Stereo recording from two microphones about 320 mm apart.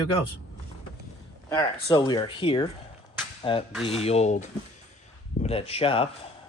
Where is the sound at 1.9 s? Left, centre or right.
Centre.